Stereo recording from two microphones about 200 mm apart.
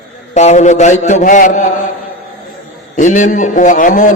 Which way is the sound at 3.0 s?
35° left (ahead or behind).